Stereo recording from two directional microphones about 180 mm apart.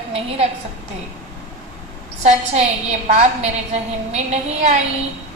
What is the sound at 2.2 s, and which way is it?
Speech, 40° right (ahead or behind).